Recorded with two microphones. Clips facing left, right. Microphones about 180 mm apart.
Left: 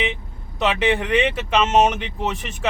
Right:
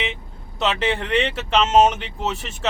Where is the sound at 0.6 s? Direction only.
10° left (ahead or behind).